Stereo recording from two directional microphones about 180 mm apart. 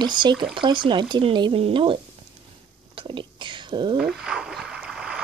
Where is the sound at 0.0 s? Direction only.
25° right (ahead or behind).